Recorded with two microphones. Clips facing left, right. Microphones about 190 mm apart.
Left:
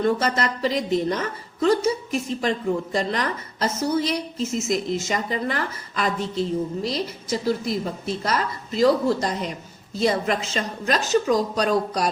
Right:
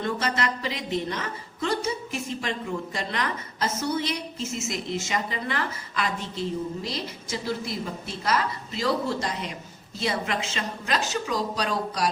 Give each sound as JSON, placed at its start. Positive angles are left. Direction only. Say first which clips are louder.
{"t": 0.0, "sound": "a woman's voice", "louder": "left 5 dB", "side_deg": 40}